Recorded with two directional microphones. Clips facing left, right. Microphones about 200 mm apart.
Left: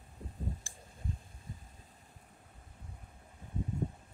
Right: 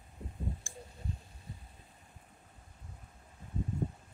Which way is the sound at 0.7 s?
50° right (ahead or behind).